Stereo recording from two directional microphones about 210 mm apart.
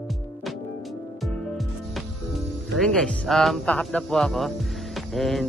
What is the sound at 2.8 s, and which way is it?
A man's voice, centre (ahead or behind).